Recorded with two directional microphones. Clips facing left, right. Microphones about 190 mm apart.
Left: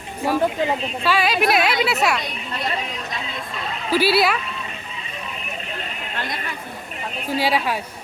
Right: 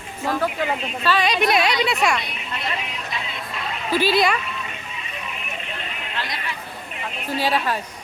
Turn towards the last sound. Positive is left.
turn(degrees=10)  # may be behind; listen again after turning